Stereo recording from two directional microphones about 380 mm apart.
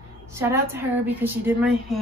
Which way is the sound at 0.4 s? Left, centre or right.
Centre.